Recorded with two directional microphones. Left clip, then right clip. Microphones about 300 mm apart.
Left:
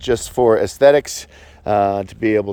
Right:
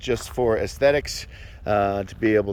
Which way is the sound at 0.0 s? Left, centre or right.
Centre.